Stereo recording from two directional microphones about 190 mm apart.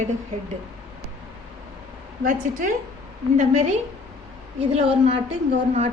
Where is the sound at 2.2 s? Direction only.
45° right (ahead or behind).